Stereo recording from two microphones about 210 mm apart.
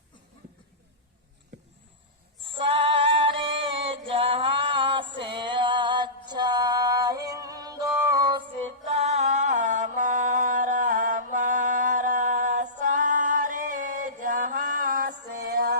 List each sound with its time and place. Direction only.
2.6 s female singing: 25° right (ahead or behind)
5.2 s music: 25° right (ahead or behind)
8.6 s music: 30° right (ahead or behind); by 15.8 s 50° right (ahead or behind)